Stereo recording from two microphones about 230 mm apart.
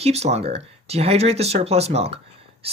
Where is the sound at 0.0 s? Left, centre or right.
Right.